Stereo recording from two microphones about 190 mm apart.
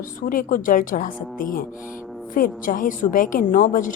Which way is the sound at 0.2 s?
45° left (ahead or behind).